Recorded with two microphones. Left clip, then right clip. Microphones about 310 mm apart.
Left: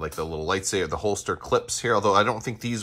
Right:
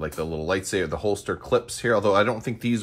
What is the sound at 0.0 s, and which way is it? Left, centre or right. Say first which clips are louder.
Speech: right 1 dB; centre.